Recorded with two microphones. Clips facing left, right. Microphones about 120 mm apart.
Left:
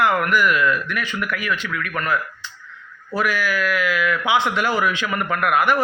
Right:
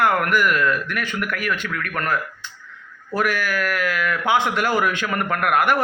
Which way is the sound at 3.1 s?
50° right (ahead or behind).